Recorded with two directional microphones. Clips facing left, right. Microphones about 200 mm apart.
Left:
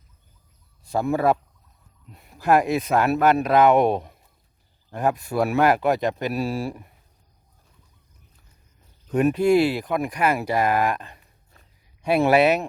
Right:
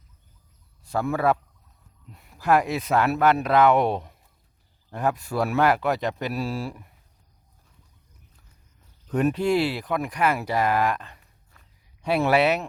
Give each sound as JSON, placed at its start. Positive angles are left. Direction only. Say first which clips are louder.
{"t": 0.9, "sound": "a man's voice", "louder": "left 2 dB", "side_deg": 15}
{"t": 2.1, "sound": "speech", "louder": "left 2 dB", "side_deg": 20}
{"t": 9.1, "sound": "speech", "louder": "left 4 dB", "side_deg": 10}
{"t": 11.5, "sound": "a sound", "louder": "left 3 dB", "side_deg": 25}
{"t": 12.0, "sound": "speech", "louder": "left 3 dB", "side_deg": 15}